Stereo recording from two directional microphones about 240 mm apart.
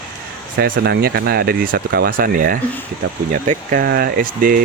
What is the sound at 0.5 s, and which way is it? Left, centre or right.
Speech, right.